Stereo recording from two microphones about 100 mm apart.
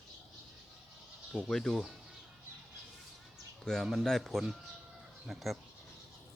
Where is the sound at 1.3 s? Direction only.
5° left (ahead or behind).